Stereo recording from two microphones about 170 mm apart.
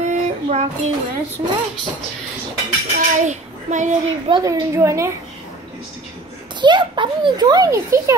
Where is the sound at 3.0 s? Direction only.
45° right (ahead or behind).